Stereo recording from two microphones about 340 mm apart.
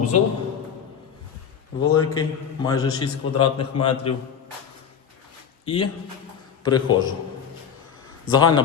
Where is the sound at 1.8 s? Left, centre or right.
Centre.